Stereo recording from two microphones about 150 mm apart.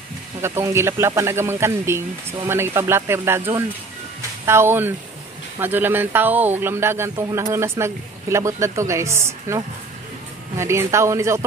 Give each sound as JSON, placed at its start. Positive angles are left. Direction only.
{"t": 0.4, "sound": "speech", "side_deg": -15}
{"t": 10.6, "sound": "speech", "side_deg": -20}